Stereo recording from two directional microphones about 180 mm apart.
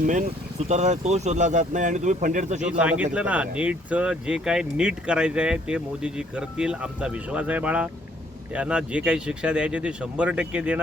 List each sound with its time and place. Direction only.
0.0 s speech: 45° right (ahead or behind)
2.6 s speech: 5° right (ahead or behind)